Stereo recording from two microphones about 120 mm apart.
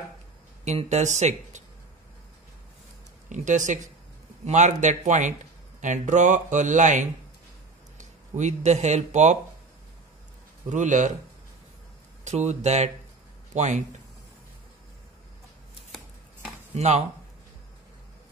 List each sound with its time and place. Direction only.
0.7 s speech: 70° right (ahead or behind)
3.3 s speech: 90° right
8.0 s speech: 75° right (ahead or behind)
10.7 s speech: 90° right
12.3 s speech: 70° right (ahead or behind)
13.5 s a man's voice: 85° right
16.7 s speech: 70° right (ahead or behind)